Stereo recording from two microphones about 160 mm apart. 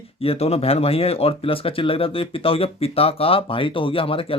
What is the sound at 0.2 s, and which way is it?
Speech, 40° left (ahead or behind).